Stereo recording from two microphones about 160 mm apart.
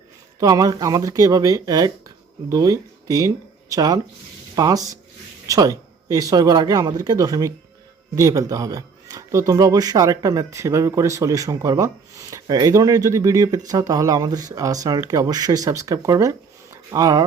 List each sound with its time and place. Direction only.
0.3 s speech: 20° right (ahead or behind)